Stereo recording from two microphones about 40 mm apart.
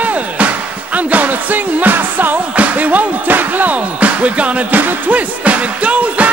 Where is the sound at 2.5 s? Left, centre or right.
Right.